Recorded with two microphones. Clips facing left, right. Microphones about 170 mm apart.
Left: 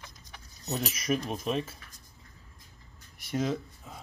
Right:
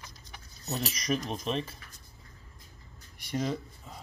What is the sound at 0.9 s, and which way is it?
Speech, 5° left (ahead or behind).